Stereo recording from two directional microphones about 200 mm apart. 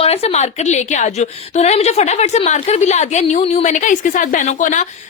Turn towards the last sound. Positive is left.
turn(degrees=40)  # may be behind; listen again after turning